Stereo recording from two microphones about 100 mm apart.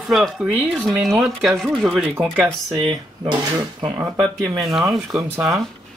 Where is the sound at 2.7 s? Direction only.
65° right (ahead or behind).